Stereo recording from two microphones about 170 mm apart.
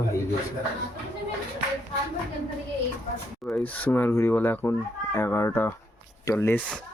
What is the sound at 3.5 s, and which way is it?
Speech, 10° left (ahead or behind).